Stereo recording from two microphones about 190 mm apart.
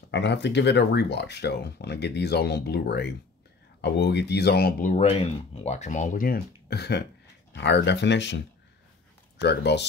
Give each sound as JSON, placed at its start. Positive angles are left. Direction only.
{"t": 0.1, "sound": "speech", "side_deg": 65}
{"t": 9.4, "sound": "speech", "side_deg": 65}